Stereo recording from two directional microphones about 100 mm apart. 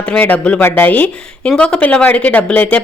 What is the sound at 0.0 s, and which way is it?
A woman's voice, 15° left (ahead or behind).